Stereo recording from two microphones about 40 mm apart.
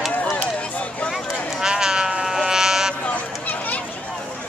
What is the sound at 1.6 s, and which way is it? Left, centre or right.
Sheep, centre.